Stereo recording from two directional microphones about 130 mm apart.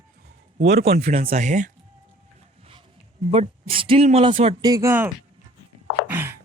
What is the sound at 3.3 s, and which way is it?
Speech, 50° right (ahead or behind).